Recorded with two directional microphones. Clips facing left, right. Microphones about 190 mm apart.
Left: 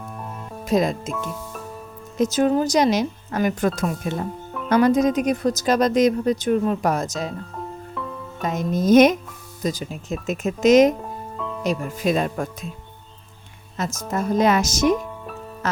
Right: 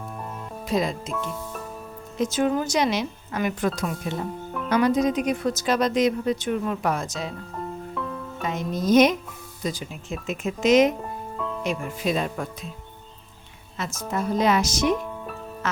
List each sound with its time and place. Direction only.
0.7 s speech: 45° left (ahead or behind)
1.1 s speech: centre (ahead or behind)
2.1 s speech: 40° left (ahead or behind)
7.5 s music: centre (ahead or behind)
8.4 s speech: 45° left (ahead or behind)
10.9 s music: centre (ahead or behind)
11.6 s speech: 45° left (ahead or behind)
14.1 s speech: 45° left (ahead or behind)
15.6 s music: 40° left (ahead or behind)